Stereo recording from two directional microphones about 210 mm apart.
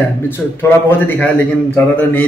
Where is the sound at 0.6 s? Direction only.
10° left (ahead or behind).